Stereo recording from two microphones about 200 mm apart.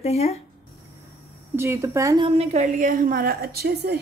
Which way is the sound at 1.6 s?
15° right (ahead or behind).